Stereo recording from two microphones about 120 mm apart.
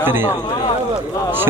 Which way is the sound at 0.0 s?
15° right (ahead or behind).